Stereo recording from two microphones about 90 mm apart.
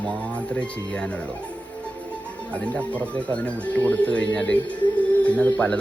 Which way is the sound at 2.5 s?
15° left (ahead or behind).